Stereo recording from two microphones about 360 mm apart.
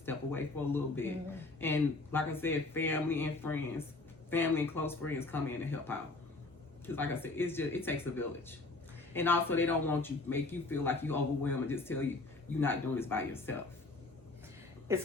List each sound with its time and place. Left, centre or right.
0.0 s speech: centre
14.9 s speech: centre